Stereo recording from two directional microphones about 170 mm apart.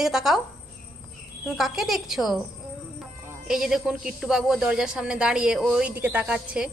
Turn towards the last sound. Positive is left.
turn(degrees=-5)  # may be behind; listen again after turning